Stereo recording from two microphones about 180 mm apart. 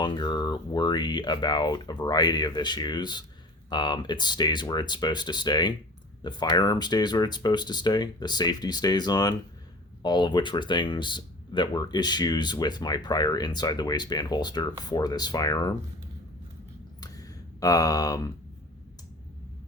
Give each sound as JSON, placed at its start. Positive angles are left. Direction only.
{"t": 0.0, "sound": "speech", "side_deg": 25}
{"t": 17.0, "sound": "clicking", "side_deg": 20}